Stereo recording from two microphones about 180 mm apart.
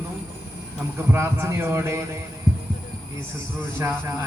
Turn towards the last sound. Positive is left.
turn(degrees=-15)  # may be behind; listen again after turning